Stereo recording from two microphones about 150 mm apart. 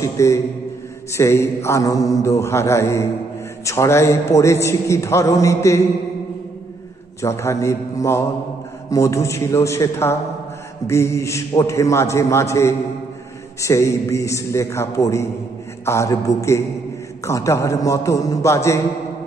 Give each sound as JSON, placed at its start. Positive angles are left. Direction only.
{"t": 0.0, "sound": "a man's voice", "side_deg": 20}
{"t": 7.2, "sound": "a man's voice", "side_deg": 20}